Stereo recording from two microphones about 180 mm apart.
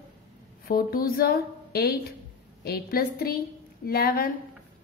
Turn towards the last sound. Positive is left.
turn(degrees=55)  # may be behind; listen again after turning